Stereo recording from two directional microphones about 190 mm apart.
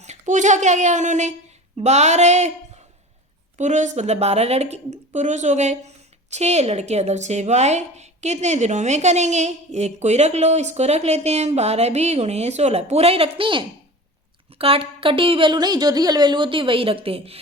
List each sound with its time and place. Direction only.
0.0 s a woman's voice: 40° right (ahead or behind)